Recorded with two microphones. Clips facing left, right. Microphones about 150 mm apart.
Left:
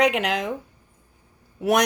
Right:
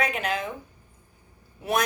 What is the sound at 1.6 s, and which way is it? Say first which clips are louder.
Speech: left 6 dB; 80° left.